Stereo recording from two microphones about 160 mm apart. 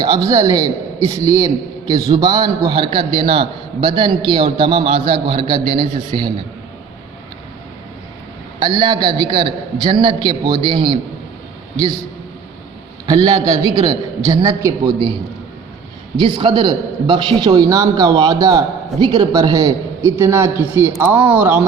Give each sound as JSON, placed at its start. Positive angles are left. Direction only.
{"t": 0.0, "sound": "a man's voice", "side_deg": -25}
{"t": 8.5, "sound": "a man's voice", "side_deg": -30}
{"t": 13.6, "sound": "a man's voice", "side_deg": -20}
{"t": 16.1, "sound": "a man's voice", "side_deg": -30}